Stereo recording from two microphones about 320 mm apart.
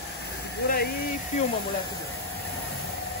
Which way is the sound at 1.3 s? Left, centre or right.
Left.